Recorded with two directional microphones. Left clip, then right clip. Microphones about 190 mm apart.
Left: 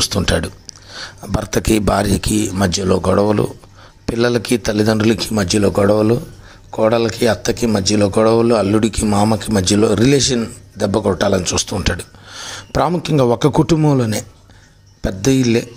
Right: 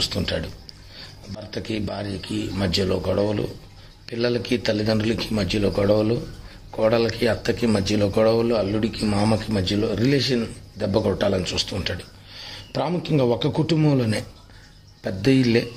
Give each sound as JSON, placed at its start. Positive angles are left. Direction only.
{"t": 0.0, "sound": "speech", "side_deg": 35}
{"t": 1.5, "sound": "speech", "side_deg": 35}
{"t": 9.0, "sound": "speech", "side_deg": 15}
{"t": 11.8, "sound": "a sound", "side_deg": 30}
{"t": 13.0, "sound": "speech", "side_deg": 30}
{"t": 13.8, "sound": "speech", "side_deg": 20}